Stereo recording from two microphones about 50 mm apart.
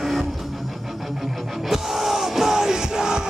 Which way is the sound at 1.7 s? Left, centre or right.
Centre.